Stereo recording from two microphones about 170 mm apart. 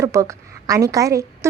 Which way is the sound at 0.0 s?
20° right (ahead or behind).